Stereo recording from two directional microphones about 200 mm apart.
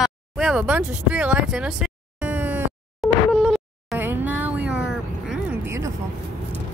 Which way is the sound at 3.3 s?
5° left (ahead or behind).